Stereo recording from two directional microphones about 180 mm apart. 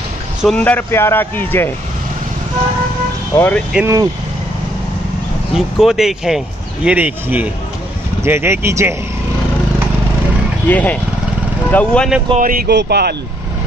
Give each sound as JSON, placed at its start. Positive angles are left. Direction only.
{"t": 0.4, "sound": "speech", "side_deg": 5}
{"t": 3.3, "sound": "speech", "side_deg": 10}
{"t": 3.7, "sound": "speech", "side_deg": -15}
{"t": 5.5, "sound": "speech", "side_deg": 0}
{"t": 10.7, "sound": "speech", "side_deg": 10}
{"t": 12.4, "sound": "speech", "side_deg": -50}